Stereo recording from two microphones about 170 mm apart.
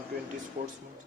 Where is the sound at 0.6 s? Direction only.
45° right (ahead or behind).